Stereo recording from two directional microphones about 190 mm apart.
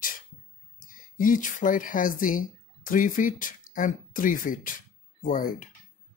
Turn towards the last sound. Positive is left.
turn(degrees=45)  # may be behind; listen again after turning